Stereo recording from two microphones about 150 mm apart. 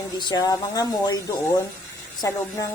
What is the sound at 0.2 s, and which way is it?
A woman's voice, 30° left (ahead or behind).